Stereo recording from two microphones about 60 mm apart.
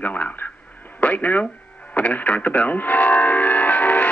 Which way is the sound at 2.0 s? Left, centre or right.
Left.